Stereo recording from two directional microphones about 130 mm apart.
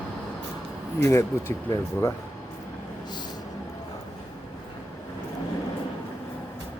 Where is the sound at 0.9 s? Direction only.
20° left (ahead or behind).